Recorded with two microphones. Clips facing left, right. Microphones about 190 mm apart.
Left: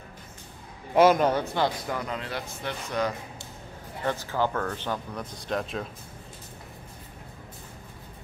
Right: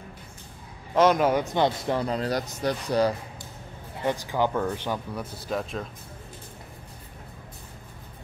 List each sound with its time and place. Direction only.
0.9 s a man's voice: 5° left (ahead or behind)
1.2 s speech: 15° right (ahead or behind)
1.9 s speech: 30° right (ahead or behind)
4.0 s speech: 15° right (ahead or behind)